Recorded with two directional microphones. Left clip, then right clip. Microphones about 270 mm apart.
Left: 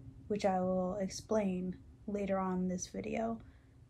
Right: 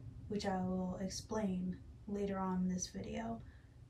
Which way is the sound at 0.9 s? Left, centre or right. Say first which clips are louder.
Left 7 dB; centre.